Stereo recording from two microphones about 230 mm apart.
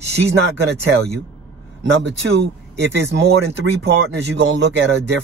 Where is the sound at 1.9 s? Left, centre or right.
Right.